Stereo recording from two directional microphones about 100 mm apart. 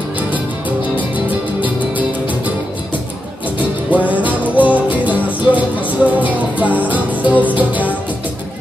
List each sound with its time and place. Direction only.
4.1 s music: 15° right (ahead or behind)